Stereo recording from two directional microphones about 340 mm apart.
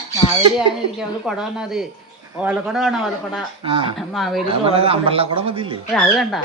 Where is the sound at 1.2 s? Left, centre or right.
Centre.